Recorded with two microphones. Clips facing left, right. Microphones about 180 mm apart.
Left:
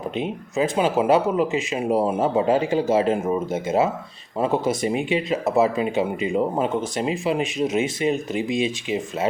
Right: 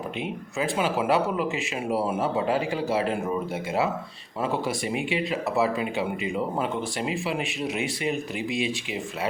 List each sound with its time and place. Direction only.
0.2 s speech: 20° left (ahead or behind)